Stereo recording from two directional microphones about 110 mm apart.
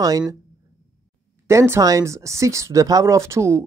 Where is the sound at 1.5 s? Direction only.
25° right (ahead or behind).